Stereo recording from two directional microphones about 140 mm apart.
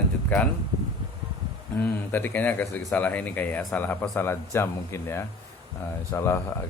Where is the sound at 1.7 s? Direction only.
15° left (ahead or behind).